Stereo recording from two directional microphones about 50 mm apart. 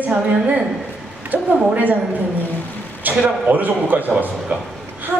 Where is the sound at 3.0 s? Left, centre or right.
Right.